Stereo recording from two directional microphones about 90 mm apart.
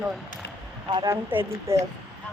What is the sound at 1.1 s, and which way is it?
Speech, 25° right (ahead or behind).